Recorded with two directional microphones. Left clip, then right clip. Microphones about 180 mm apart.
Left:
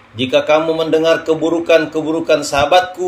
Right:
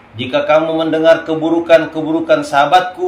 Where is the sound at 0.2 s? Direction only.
50° left (ahead or behind).